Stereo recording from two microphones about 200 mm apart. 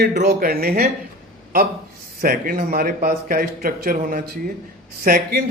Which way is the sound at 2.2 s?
45° right (ahead or behind).